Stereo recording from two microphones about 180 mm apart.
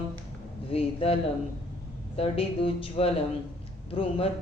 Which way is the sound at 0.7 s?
30° left (ahead or behind).